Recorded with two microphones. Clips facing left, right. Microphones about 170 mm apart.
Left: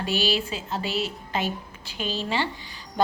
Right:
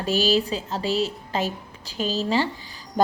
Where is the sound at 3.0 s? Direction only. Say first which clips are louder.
Right 3 dB; 40° right (ahead or behind).